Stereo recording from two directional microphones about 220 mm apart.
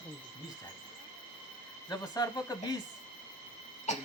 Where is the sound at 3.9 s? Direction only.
30° left (ahead or behind).